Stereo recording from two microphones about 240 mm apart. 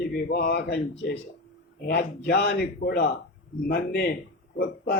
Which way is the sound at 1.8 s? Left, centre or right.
Left.